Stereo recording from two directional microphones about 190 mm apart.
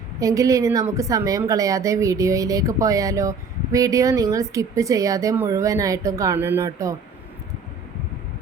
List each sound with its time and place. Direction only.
0.2 s a woman's voice: 15° right (ahead or behind)